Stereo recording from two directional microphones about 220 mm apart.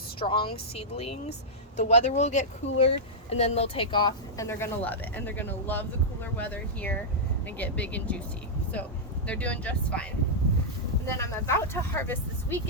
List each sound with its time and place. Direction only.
0.2 s speech: 25° left (ahead or behind); by 10.1 s 5° left (ahead or behind)
11.2 s speech: 10° left (ahead or behind)